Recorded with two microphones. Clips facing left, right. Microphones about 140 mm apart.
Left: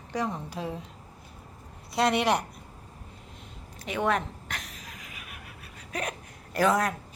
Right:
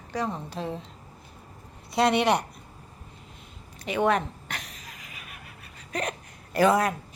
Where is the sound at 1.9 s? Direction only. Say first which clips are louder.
Right 2 dB; centre (ahead or behind).